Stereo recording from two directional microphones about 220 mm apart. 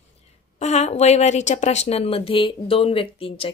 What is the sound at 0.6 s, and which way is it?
A woman's voice, 30° left (ahead or behind).